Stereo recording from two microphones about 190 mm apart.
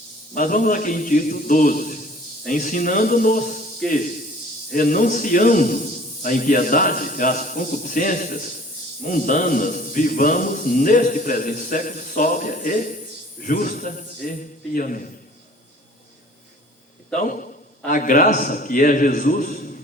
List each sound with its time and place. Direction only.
0.3 s a man's voice: 45° left (ahead or behind)
17.2 s a man's voice: 45° left (ahead or behind)